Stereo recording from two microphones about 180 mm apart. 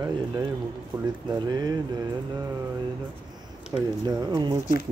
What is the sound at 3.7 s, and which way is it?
Speech, 20° right (ahead or behind).